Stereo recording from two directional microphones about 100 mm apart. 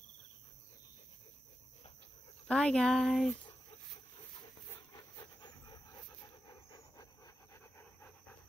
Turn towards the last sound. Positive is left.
turn(degrees=30)  # may be behind; listen again after turning